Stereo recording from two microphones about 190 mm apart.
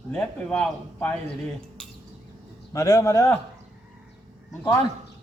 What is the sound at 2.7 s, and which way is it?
Speech, 15° left (ahead or behind).